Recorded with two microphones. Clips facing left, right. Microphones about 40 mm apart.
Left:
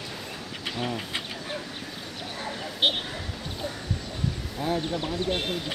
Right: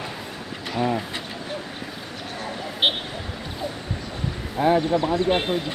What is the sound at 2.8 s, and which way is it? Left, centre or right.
Vehicle, right.